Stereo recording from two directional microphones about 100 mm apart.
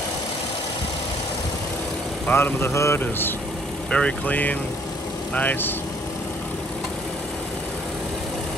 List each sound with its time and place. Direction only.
2.2 s a man's voice: 20° left (ahead or behind)